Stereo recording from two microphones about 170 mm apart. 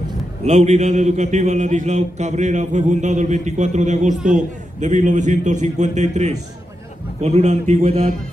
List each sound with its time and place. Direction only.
0.4 s a man's voice: 40° right (ahead or behind)